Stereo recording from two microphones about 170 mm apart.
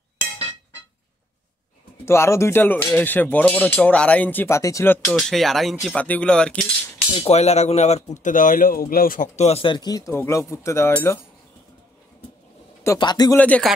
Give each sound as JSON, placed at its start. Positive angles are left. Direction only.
{"t": 2.0, "sound": "speech", "side_deg": 15}
{"t": 7.2, "sound": "speech", "side_deg": 40}
{"t": 12.8, "sound": "a man's voice", "side_deg": 20}
{"t": 13.4, "sound": "speech", "side_deg": 10}